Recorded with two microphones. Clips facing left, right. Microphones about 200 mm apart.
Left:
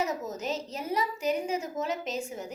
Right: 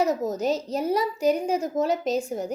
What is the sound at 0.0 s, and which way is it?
A woman's voice, 35° right (ahead or behind).